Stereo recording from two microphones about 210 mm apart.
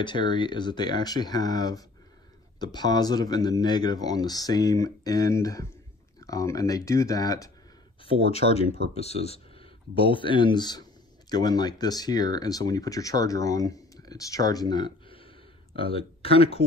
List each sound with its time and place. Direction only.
0.0 s speech: 20° left (ahead or behind)
8.0 s speech: 30° left (ahead or behind)